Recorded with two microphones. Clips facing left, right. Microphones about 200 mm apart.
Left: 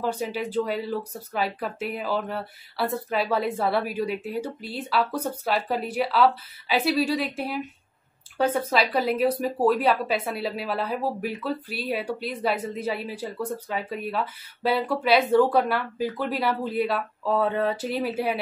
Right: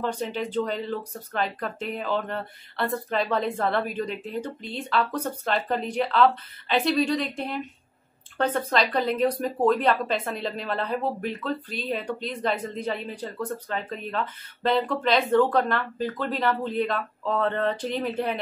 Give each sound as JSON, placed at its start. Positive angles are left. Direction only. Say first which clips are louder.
{"t": 0.0, "sound": "speech", "louder": "left 1 dB", "side_deg": 5}